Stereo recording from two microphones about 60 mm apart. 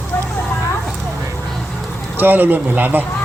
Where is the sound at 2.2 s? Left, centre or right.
Right.